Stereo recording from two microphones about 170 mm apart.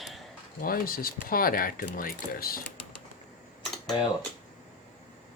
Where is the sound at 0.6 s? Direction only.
60° left (ahead or behind).